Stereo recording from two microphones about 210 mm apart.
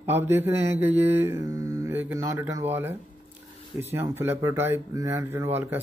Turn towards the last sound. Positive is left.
turn(degrees=-10)  # may be behind; listen again after turning